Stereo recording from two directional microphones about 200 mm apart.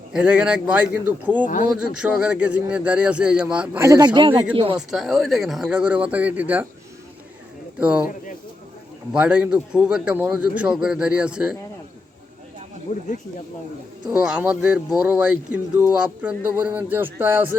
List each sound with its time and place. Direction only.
0.1 s speech: 5° right (ahead or behind); by 4.8 s 25° right (ahead or behind)
4.9 s speech: centre (ahead or behind)
7.8 s speech: 5° right (ahead or behind)
9.1 s speech: 5° right (ahead or behind)
12.9 s speech: 40° left (ahead or behind)
14.1 s speech: 5° right (ahead or behind)